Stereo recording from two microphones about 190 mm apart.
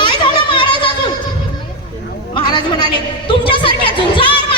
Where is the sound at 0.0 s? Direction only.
25° left (ahead or behind).